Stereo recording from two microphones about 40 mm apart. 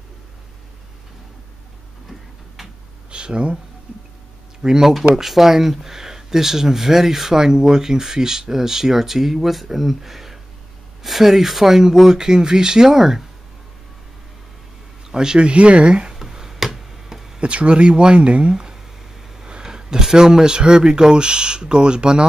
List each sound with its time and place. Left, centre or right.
2.0 s tick-tock: centre
3.1 s a sound: right
4.6 s speech: centre
4.9 s speech: centre
15.0 s speech: centre
16.2 s a sound: centre
17.4 s speech: right
18.5 s a sound: centre
19.3 s speech: centre